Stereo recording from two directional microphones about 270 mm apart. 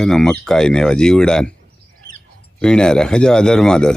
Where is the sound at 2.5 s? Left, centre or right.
Centre.